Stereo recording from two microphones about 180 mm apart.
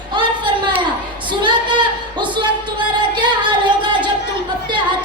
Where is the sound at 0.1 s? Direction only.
25° right (ahead or behind).